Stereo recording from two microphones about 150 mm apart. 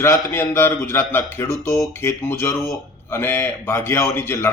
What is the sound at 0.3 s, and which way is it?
A man's voice, 15° left (ahead or behind).